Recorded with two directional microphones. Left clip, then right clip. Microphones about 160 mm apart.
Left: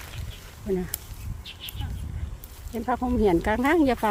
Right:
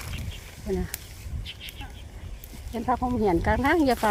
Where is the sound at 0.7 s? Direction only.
25° left (ahead or behind).